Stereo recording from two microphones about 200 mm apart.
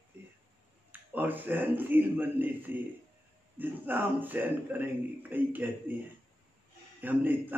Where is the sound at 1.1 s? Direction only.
10° right (ahead or behind).